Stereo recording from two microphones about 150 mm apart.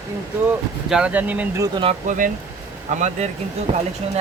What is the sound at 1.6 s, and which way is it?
Speech, 35° right (ahead or behind).